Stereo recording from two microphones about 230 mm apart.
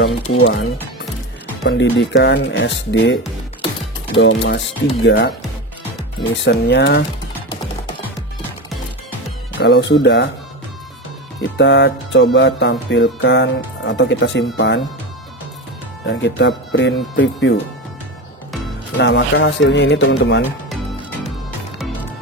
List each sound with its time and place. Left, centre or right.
0.3 s speech: left
1.6 s music: left
4.2 s music: left
5.0 s speech: left
6.3 s music: left
9.6 s music: left
11.5 s music: left
16.1 s music: left
18.9 s music: left
21.7 s music: centre